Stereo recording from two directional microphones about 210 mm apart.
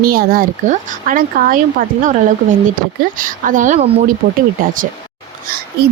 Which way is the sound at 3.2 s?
40° right (ahead or behind).